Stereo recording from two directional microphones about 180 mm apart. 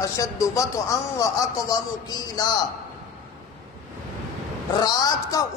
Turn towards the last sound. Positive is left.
turn(degrees=20)  # may be behind; listen again after turning